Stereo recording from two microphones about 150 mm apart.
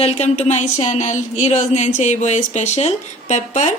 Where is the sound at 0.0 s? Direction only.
45° left (ahead or behind).